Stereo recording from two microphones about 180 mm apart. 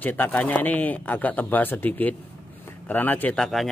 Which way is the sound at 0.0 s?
10° left (ahead or behind).